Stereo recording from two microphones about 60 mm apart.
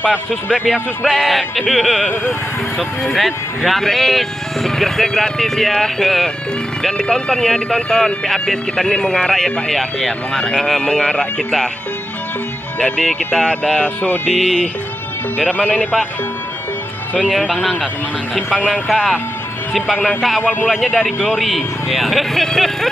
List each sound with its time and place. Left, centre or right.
0.0 s a man's voice: centre
1.0 s speech: centre
1.6 s a man's voice: centre
12.7 s speech: centre
17.4 s a man's voice: centre